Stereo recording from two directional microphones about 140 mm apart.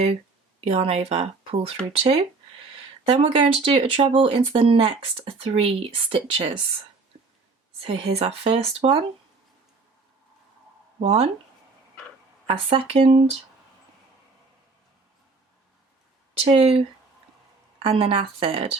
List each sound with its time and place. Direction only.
0.6 s speech: 45° right (ahead or behind)
7.8 s speech: 45° right (ahead or behind)
11.0 s speech: 50° right (ahead or behind)
12.5 s speech: 45° right (ahead or behind)
16.4 s speech: 45° right (ahead or behind)
17.8 s speech: 45° right (ahead or behind)